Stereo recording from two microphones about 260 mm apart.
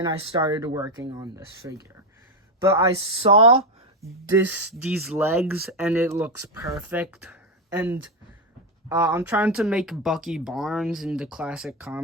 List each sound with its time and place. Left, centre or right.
0.0 s speech: centre
4.0 s speech: centre